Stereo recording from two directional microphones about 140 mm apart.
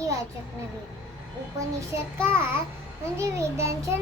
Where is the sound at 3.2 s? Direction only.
20° right (ahead or behind).